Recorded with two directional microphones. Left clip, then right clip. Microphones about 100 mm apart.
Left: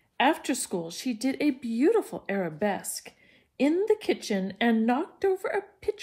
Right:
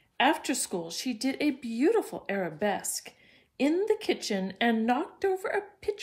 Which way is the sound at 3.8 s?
40° left (ahead or behind).